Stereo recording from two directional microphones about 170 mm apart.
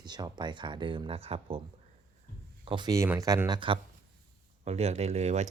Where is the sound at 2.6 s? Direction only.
25° right (ahead or behind).